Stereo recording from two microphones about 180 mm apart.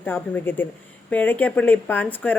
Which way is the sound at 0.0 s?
10° left (ahead or behind).